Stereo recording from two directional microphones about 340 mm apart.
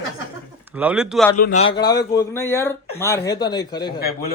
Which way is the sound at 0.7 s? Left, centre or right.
Centre.